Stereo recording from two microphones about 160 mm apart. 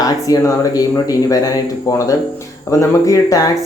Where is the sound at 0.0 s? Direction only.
20° left (ahead or behind).